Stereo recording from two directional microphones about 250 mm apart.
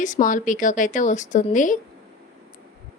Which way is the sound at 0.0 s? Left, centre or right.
Left.